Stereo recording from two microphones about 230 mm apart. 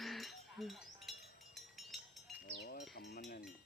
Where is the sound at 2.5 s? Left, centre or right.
Left.